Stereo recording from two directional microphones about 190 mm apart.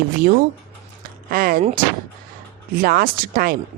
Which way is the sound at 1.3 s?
50° right (ahead or behind).